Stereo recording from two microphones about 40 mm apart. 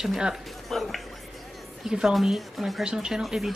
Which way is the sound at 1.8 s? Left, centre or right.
Centre.